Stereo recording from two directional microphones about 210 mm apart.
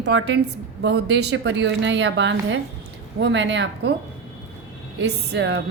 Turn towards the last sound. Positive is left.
turn(degrees=-50)  # may be behind; listen again after turning